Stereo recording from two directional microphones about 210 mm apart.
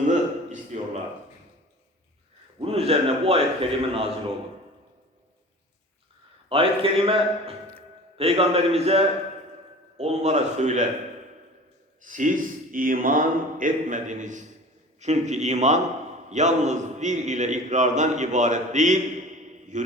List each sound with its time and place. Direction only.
0.1 s a sound: 35° right (ahead or behind)
2.6 s a man's voice: 30° right (ahead or behind)
6.5 s a man's voice: 25° right (ahead or behind)
12.0 s a man's voice: 40° right (ahead or behind)